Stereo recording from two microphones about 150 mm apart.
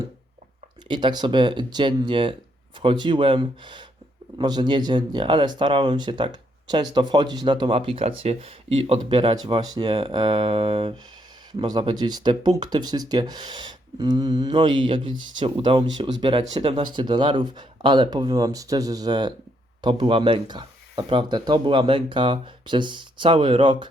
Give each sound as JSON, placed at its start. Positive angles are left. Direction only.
{"t": 0.9, "sound": "speech", "side_deg": -30}